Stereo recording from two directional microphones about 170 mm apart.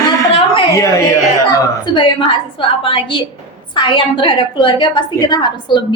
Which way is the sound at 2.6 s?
30° left (ahead or behind).